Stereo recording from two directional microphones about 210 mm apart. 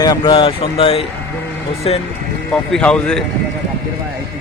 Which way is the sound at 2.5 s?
5° left (ahead or behind).